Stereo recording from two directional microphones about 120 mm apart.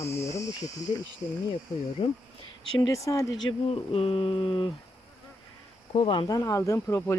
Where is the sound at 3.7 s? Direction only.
50° left (ahead or behind).